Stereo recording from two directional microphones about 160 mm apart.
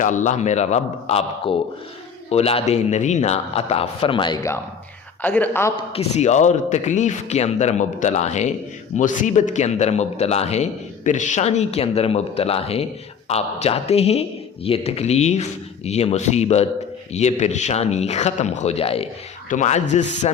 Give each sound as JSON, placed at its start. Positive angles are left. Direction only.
{"t": 0.0, "sound": "a man's voice", "side_deg": 50}
{"t": 5.2, "sound": "speech", "side_deg": 10}
{"t": 5.9, "sound": "a man's voice", "side_deg": 40}
{"t": 19.5, "sound": "a man's voice", "side_deg": 50}